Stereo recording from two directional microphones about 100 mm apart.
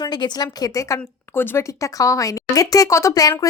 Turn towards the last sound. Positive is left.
turn(degrees=35)  # may be behind; listen again after turning